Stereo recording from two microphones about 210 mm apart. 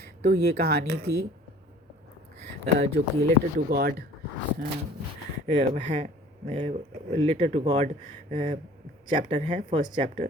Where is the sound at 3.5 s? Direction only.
45° right (ahead or behind).